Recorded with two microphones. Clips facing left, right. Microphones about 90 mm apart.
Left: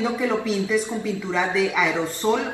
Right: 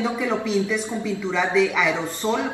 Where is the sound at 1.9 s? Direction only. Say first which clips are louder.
Left 2 dB; 25° right (ahead or behind).